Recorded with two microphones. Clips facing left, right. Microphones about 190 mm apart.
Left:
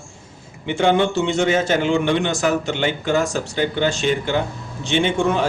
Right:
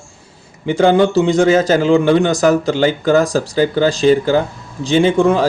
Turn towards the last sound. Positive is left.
turn(degrees=-35)  # may be behind; listen again after turning